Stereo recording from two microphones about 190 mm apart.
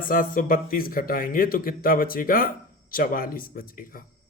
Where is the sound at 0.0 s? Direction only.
45° left (ahead or behind).